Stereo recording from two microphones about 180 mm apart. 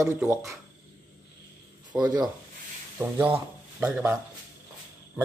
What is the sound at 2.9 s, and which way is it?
Speech, 10° right (ahead or behind).